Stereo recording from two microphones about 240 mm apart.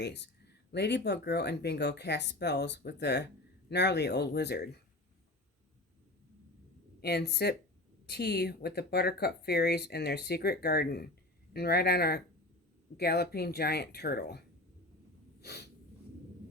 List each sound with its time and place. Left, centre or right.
0.0 s speech: left
7.0 s speech: left
15.4 s snort: left